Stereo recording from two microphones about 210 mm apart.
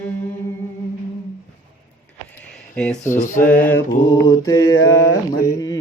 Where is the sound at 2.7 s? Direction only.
5° left (ahead or behind).